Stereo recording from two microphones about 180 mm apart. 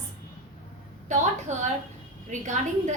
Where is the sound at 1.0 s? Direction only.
40° right (ahead or behind).